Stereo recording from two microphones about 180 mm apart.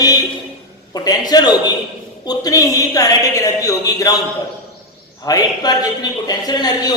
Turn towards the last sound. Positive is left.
turn(degrees=20)  # may be behind; listen again after turning